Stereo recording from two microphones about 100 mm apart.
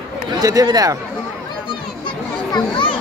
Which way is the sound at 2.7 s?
55° left (ahead or behind).